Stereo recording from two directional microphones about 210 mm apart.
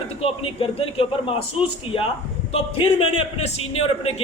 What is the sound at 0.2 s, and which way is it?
A man's voice, 25° left (ahead or behind).